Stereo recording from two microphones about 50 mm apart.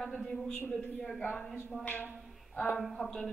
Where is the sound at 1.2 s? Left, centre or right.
Left.